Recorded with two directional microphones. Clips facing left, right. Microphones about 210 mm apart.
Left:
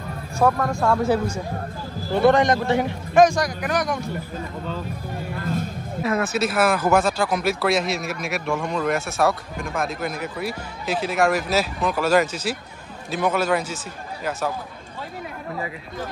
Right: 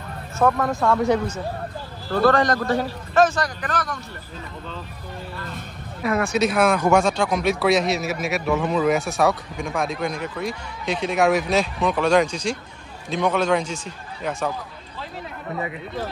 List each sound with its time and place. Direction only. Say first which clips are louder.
0.4 s speech: even; centre (ahead or behind)
2.0 s a man's voice: left 1 dB; 20° left (ahead or behind)
6.0 s speech: right 2 dB; centre (ahead or behind)